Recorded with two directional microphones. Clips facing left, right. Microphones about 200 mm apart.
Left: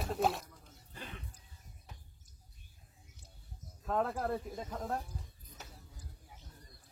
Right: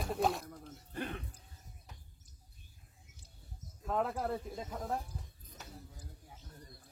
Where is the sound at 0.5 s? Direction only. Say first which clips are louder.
Right 9 dB; 55° right (ahead or behind).